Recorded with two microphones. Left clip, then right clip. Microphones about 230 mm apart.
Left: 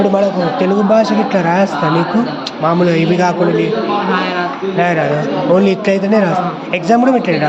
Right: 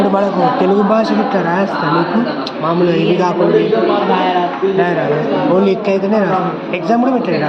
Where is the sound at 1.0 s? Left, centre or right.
Left.